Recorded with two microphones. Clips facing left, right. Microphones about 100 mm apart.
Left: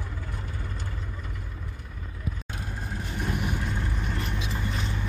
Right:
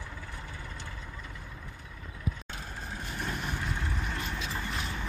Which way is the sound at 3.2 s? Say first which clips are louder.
Left 5 dB; 15° left (ahead or behind).